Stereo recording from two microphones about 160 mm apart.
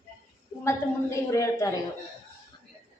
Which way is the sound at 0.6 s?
20° left (ahead or behind).